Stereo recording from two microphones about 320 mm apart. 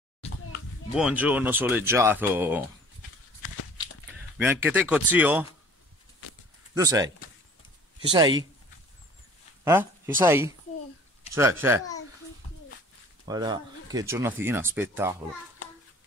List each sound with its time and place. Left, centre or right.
0.2 s children playing: centre
0.9 s speech: centre
4.4 s speech: centre
6.7 s speech: centre
9.7 s speech: centre
13.3 s speech: centre